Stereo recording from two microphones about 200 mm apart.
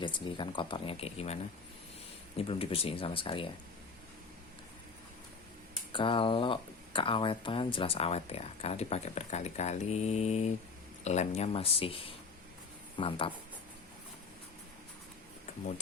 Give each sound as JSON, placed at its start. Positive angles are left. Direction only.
{"t": 0.0, "sound": "speech", "side_deg": 25}
{"t": 2.4, "sound": "speech", "side_deg": 30}
{"t": 5.9, "sound": "speech", "side_deg": 25}